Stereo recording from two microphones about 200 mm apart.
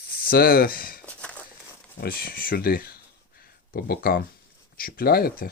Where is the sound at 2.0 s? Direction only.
45° left (ahead or behind).